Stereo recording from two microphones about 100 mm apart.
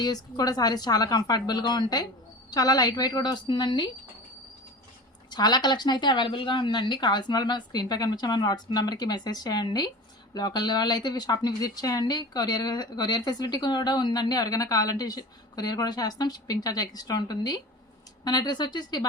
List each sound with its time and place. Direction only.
0.0 s speech: 40° left (ahead or behind)
5.3 s speech: 45° left (ahead or behind)